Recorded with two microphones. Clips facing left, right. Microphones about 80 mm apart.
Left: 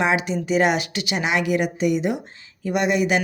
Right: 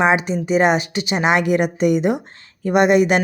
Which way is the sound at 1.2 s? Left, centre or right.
Right.